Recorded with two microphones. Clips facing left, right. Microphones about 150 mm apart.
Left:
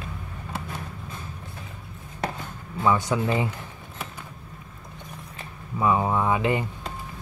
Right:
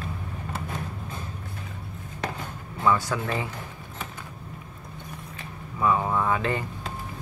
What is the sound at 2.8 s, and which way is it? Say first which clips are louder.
Speech: left 2 dB; 20° left (ahead or behind).